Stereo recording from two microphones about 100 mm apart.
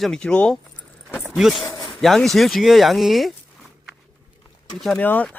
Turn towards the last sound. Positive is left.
turn(degrees=20)  # may be behind; listen again after turning